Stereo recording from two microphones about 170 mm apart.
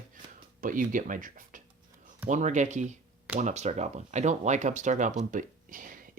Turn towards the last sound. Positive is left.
turn(degrees=-50)  # may be behind; listen again after turning